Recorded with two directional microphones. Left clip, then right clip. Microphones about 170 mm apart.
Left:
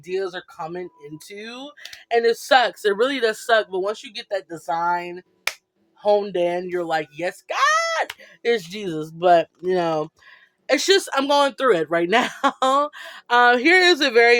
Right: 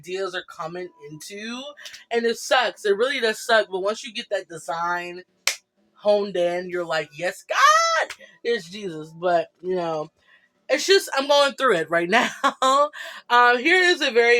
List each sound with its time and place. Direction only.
0.0 s speech: 35° left (ahead or behind)
8.4 s speech: 65° left (ahead or behind)
10.7 s speech: 45° left (ahead or behind)